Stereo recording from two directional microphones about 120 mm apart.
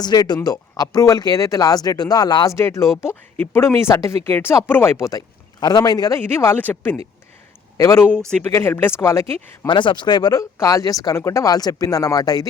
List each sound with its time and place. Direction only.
0.0 s speech: 35° left (ahead or behind); by 6.9 s 15° left (ahead or behind)
7.8 s speech: 30° left (ahead or behind)
9.6 s speech: 40° left (ahead or behind)